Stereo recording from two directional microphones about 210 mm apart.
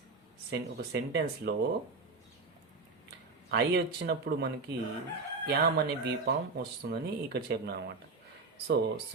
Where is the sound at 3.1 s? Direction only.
50° right (ahead or behind).